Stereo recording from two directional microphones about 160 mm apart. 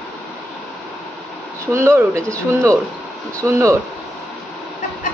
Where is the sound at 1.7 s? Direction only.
15° right (ahead or behind).